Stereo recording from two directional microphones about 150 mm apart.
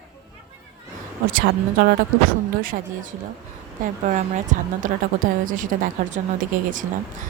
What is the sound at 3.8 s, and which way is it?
Speech, 55° right (ahead or behind).